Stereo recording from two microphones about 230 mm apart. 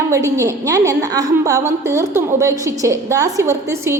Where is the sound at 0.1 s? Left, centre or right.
Centre.